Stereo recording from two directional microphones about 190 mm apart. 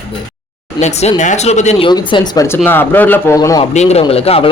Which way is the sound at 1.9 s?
25° left (ahead or behind).